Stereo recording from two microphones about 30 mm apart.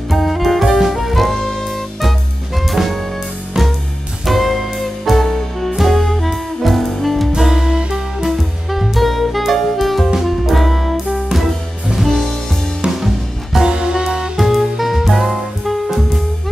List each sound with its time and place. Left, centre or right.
0.1 s music: centre
2.0 s music: centre
3.6 s music: centre
4.3 s music: centre
7.3 s music: centre
8.3 s music: centre
10.1 s music: centre
10.5 s music: centre
13.0 s music: centre
13.7 s music: right
14.3 s music: centre